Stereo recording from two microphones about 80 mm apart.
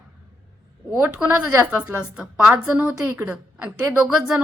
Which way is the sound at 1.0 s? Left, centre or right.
Centre.